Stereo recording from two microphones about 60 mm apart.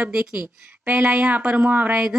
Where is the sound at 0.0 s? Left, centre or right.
Centre.